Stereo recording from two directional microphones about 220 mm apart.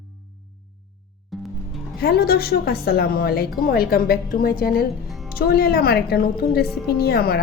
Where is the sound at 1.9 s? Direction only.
45° left (ahead or behind).